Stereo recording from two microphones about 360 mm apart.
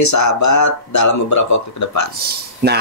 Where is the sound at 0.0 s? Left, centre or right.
Left.